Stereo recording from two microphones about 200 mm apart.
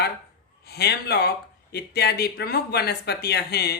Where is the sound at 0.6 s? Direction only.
55° left (ahead or behind).